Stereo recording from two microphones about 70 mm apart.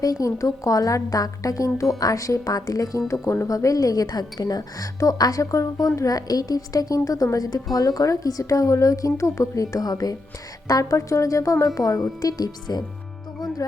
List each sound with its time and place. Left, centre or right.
0.0 s a woman's voice: left
12.2 s a woman's voice: left